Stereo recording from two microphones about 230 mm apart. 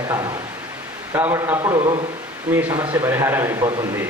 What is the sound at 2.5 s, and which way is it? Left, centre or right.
A man's voice, centre.